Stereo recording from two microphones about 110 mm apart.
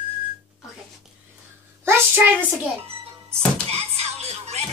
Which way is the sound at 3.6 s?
70° right (ahead or behind).